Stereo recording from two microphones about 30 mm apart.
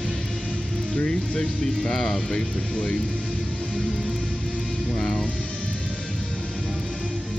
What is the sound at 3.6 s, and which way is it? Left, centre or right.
Music, left.